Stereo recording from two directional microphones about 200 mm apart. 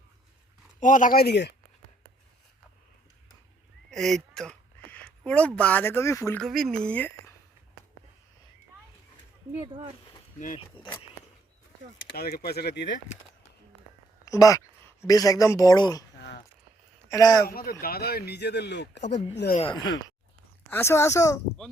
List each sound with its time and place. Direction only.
0.8 s speech: 40° left (ahead or behind); by 1.5 s 55° left (ahead or behind)
3.9 s speech: centre (ahead or behind)
6.4 s speech: centre (ahead or behind)
10.8 s speech: 20° left (ahead or behind)
12.0 s speech: 50° left (ahead or behind)
14.3 s speech: 15° left (ahead or behind)
17.1 s speech: 20° left (ahead or behind)
17.5 s speech: 50° left (ahead or behind)
19.5 s speech: 25° left (ahead or behind)
20.7 s speech: 10° left (ahead or behind)